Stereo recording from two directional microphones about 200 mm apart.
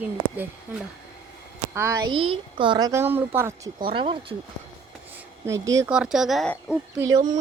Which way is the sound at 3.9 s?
25° right (ahead or behind).